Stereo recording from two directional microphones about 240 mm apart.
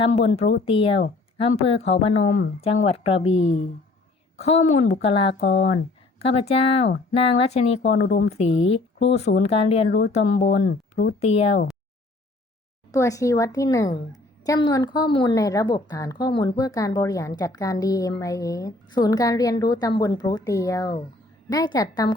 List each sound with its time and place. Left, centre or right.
0.0 s a woman's voice: left
5.3 s speech: left
6.2 s speech: left
11.2 s speech: left
12.9 s a woman's voice: centre